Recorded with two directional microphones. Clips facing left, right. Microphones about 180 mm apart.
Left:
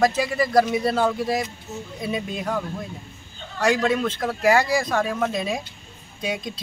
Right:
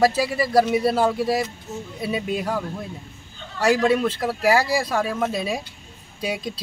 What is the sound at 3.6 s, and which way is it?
Speech, 5° right (ahead or behind).